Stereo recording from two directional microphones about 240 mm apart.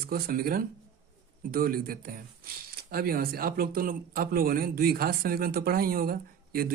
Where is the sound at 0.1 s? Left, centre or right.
Right.